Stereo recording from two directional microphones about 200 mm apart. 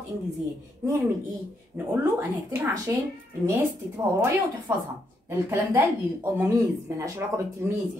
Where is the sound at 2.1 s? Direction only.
15° right (ahead or behind).